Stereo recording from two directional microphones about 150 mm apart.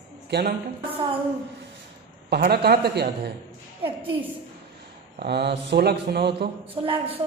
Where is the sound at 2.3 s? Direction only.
90° right.